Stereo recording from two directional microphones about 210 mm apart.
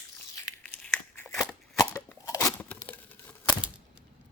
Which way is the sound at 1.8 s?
15° left (ahead or behind).